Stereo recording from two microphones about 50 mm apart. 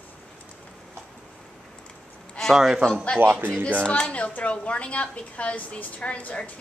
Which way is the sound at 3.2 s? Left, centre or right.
Right.